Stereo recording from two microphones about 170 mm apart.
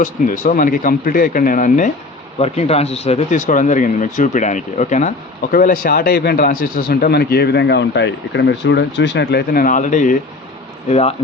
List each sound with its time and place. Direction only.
0.0 s speech: 50° left (ahead or behind)
2.4 s speech: 40° left (ahead or behind)